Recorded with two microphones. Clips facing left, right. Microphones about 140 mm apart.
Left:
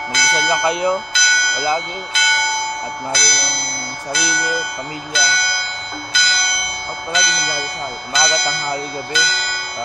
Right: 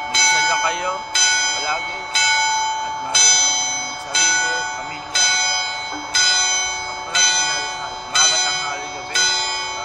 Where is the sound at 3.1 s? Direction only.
20° right (ahead or behind).